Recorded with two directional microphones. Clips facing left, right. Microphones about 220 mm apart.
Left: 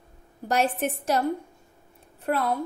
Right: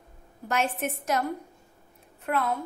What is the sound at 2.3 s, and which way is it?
Speech, 35° left (ahead or behind).